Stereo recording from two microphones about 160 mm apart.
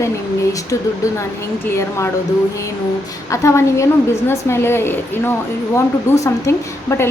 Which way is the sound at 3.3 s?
20° left (ahead or behind).